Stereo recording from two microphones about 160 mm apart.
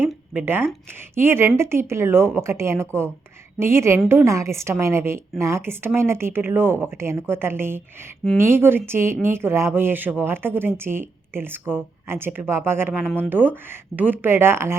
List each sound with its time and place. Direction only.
0.0 s a sound: 15° right (ahead or behind)
1.1 s speech: 15° right (ahead or behind)
13.1 s speech: 5° left (ahead or behind)
13.3 s speech: 10° right (ahead or behind)